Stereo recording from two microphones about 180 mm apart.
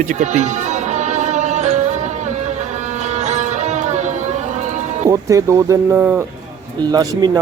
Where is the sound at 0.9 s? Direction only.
40° right (ahead or behind).